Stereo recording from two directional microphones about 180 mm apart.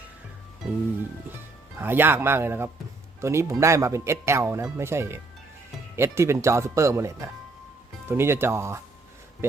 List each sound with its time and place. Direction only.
1.8 s speech: 10° right (ahead or behind)